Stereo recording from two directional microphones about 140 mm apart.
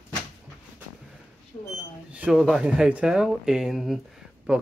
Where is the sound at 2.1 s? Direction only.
5° right (ahead or behind).